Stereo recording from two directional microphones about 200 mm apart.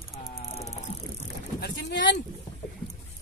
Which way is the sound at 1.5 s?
60° left (ahead or behind).